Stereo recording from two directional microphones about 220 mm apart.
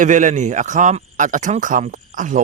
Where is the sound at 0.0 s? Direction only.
35° right (ahead or behind).